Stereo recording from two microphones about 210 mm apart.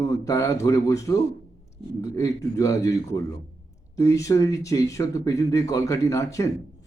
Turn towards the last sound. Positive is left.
turn(degrees=15)  # may be behind; listen again after turning